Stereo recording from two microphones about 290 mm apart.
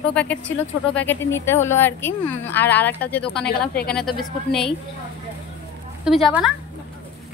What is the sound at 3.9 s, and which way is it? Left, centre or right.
Speech, centre.